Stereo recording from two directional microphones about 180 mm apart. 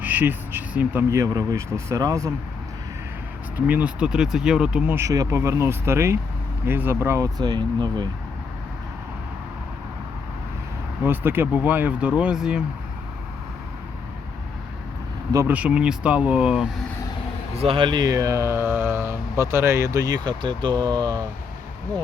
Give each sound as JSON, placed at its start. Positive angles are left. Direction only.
{"t": 0.0, "sound": "speech", "side_deg": -10}
{"t": 3.7, "sound": "speech", "side_deg": -5}
{"t": 4.9, "sound": "speech", "side_deg": -20}
{"t": 11.0, "sound": "speech", "side_deg": -10}
{"t": 15.3, "sound": "speech", "side_deg": -15}
{"t": 17.6, "sound": "speech", "side_deg": -30}